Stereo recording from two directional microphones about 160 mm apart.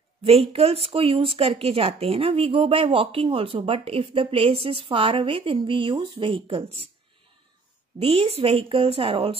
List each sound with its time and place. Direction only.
0.2 s speech: 35° right (ahead or behind)
8.0 s speech: 35° right (ahead or behind)